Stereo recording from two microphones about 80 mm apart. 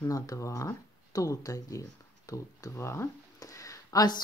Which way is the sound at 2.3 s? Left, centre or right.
Left.